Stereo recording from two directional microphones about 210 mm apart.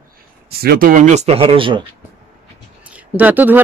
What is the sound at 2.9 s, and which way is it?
Speech, 5° right (ahead or behind).